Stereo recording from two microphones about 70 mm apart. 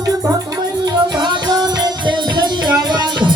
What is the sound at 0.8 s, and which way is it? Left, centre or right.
Music, right.